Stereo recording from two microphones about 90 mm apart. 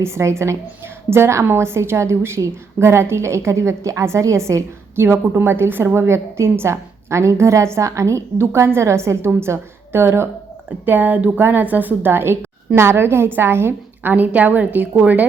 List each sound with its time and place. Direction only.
0.0 s a woman's voice: 30° right (ahead or behind)